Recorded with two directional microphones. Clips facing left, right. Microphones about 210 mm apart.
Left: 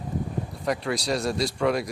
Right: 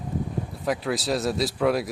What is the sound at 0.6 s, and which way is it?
Speech, centre (ahead or behind).